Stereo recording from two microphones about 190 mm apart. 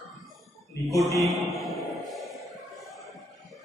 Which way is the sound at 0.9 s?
15° left (ahead or behind).